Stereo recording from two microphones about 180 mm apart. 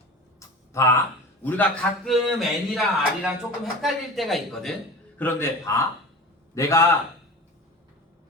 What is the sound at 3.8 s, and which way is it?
Speech, centre (ahead or behind).